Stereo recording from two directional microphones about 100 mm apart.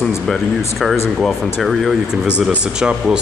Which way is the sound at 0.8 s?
Centre (ahead or behind).